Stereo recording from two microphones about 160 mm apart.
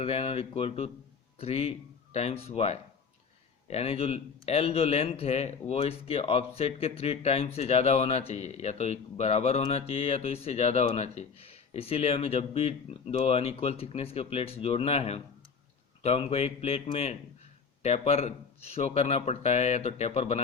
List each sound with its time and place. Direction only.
0.0 s speech: 40° left (ahead or behind)